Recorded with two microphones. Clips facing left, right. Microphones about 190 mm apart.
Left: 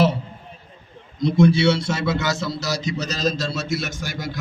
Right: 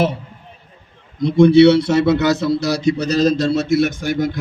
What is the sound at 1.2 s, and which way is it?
A man's voice, 60° right (ahead or behind).